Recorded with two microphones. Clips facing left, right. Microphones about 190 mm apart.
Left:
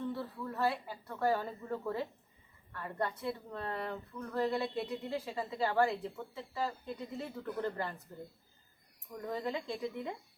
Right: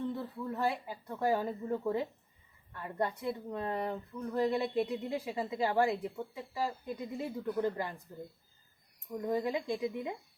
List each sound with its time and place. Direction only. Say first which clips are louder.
0.1 s speech: right 2 dB; 20° right (ahead or behind)
9.2 s speech: right 4 dB; 15° right (ahead or behind)